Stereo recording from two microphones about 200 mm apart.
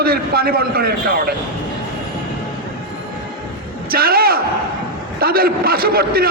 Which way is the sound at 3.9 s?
50° right (ahead or behind).